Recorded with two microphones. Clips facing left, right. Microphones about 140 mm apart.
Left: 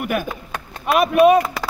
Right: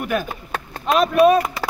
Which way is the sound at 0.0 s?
10° left (ahead or behind).